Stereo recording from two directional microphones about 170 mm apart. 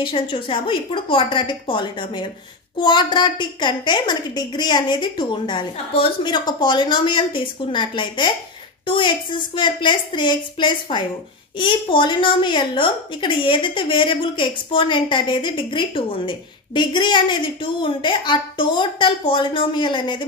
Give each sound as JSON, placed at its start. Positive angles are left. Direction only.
{"t": 0.0, "sound": "a woman's voice", "side_deg": 30}